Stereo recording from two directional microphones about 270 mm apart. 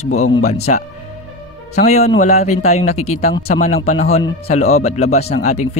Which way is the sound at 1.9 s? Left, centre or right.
Left.